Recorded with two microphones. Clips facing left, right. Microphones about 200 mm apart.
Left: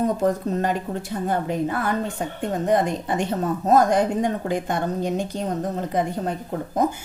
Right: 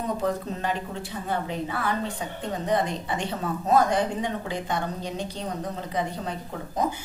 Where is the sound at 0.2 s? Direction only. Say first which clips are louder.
Left 6 dB; 45° left (ahead or behind).